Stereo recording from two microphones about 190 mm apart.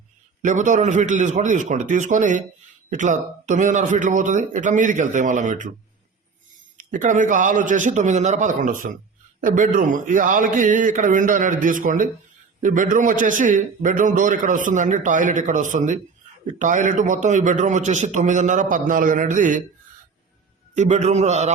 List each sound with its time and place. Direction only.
0.4 s a man's voice: 40° right (ahead or behind)
6.7 s a man's voice: 40° right (ahead or behind)
20.7 s a man's voice: 40° right (ahead or behind)